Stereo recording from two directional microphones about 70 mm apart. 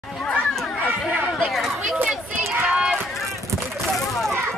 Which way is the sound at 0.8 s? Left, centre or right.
Right.